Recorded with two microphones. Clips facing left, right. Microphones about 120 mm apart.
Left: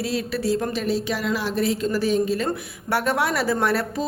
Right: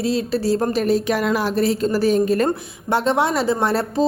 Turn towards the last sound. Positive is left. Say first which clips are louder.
# right 3 dB
turn(degrees=-30)  # may be behind; listen again after turning